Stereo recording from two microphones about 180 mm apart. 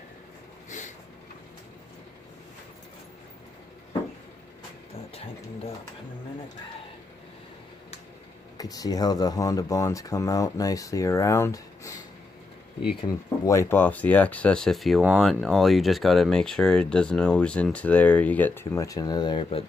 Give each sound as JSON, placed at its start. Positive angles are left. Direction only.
{"t": 5.1, "sound": "speech", "side_deg": 35}
{"t": 8.5, "sound": "speech", "side_deg": 20}